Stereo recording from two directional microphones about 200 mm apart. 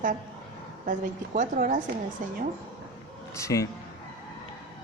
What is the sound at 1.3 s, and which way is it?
A woman's voice, 40° right (ahead or behind).